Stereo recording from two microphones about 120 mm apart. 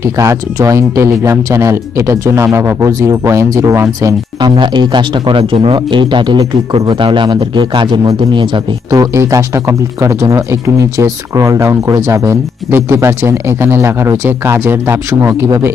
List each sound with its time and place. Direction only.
0.0 s a man's voice: 25° right (ahead or behind)
4.4 s a man's voice: 40° right (ahead or behind); by 15.4 s 20° right (ahead or behind)